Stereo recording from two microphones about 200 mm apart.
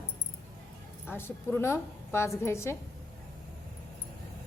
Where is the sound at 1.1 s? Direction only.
10° left (ahead or behind).